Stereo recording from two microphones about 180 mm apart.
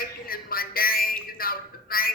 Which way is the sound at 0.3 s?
55° left (ahead or behind).